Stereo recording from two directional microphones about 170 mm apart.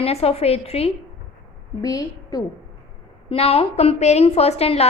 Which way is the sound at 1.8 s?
20° left (ahead or behind).